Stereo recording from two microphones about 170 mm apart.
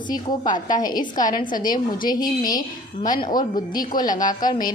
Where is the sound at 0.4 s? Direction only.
50° left (ahead or behind).